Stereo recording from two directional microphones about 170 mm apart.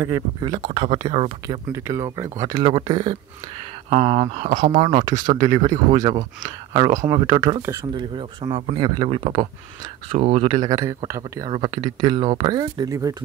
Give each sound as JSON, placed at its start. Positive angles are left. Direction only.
{"t": 0.0, "sound": "speech", "side_deg": -25}
{"t": 1.7, "sound": "speech", "side_deg": -15}
{"t": 4.7, "sound": "speech", "side_deg": -30}
{"t": 7.2, "sound": "speech", "side_deg": -25}